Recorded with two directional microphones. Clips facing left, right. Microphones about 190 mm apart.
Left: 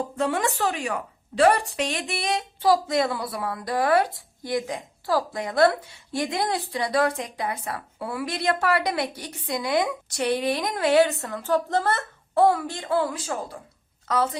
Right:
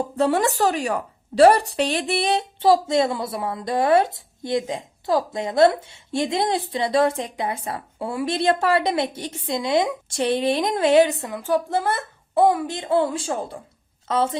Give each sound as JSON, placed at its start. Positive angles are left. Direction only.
{"t": 0.2, "sound": "a woman's voice", "side_deg": -35}